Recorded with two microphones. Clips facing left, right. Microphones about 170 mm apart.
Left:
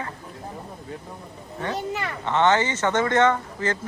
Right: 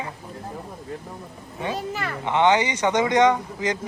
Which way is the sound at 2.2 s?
15° right (ahead or behind).